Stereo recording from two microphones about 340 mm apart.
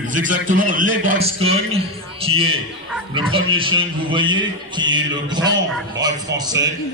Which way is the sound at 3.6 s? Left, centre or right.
Centre.